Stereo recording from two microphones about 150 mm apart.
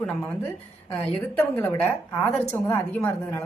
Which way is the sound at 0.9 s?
15° left (ahead or behind).